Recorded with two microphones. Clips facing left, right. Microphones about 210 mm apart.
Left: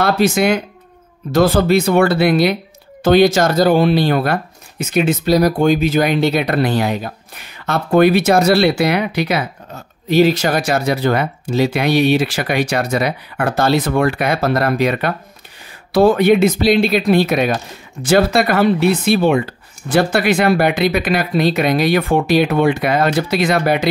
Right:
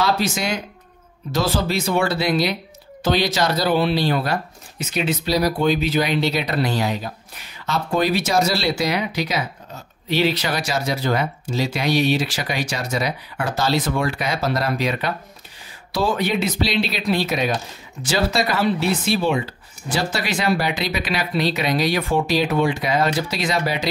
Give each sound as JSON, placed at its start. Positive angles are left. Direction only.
{"t": 0.0, "sound": "speech", "side_deg": 60}
{"t": 10.0, "sound": "speech", "side_deg": 45}